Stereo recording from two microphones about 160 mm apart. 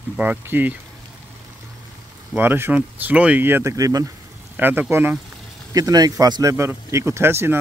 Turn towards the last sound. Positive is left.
turn(degrees=-15)  # may be behind; listen again after turning